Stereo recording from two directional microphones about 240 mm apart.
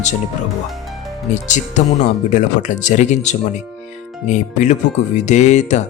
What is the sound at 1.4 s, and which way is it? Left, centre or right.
Speech, left.